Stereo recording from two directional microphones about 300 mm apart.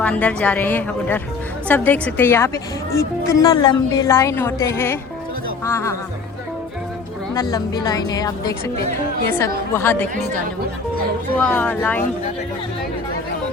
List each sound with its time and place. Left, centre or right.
0.0 s a woman's voice: centre
7.3 s speech: centre
9.7 s speech: centre
11.3 s a woman's voice: centre